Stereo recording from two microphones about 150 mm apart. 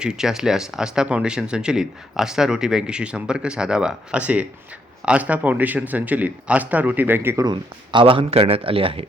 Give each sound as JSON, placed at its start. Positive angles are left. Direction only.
{"t": 0.0, "sound": "a man's voice", "side_deg": -5}
{"t": 7.4, "sound": "speech", "side_deg": -30}